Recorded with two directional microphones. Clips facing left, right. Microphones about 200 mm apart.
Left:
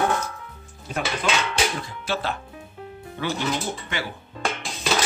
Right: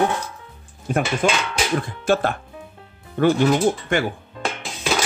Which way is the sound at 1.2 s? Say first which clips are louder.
Right 3 dB; 50° right (ahead or behind).